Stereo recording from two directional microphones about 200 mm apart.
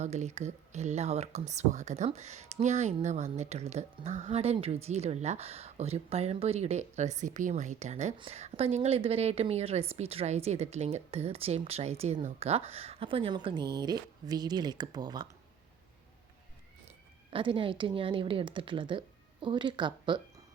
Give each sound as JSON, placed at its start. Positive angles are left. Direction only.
{"t": 0.0, "sound": "a woman's voice", "side_deg": -35}
{"t": 17.3, "sound": "a woman's voice", "side_deg": -25}